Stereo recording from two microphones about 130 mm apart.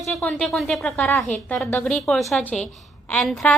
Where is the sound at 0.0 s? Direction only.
Centre (ahead or behind).